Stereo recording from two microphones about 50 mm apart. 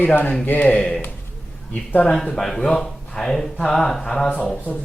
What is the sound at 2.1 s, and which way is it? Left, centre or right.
Speech, centre.